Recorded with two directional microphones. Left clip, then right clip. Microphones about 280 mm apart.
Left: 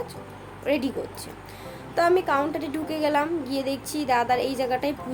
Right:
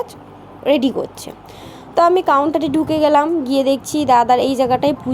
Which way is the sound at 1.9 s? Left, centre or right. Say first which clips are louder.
Right 9 dB; right.